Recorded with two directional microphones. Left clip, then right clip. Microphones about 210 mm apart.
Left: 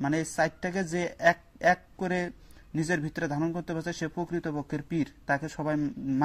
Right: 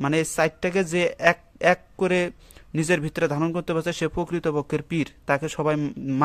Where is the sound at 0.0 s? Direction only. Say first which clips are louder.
Right 6 dB; 30° right (ahead or behind).